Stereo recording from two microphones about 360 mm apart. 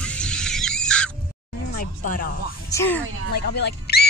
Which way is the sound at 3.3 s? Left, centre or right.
Left.